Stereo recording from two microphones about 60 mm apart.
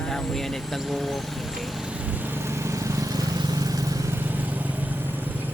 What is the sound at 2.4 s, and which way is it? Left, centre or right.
Vehicle, right.